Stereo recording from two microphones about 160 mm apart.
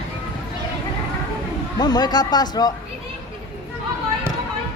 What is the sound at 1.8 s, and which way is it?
Speech, 25° left (ahead or behind).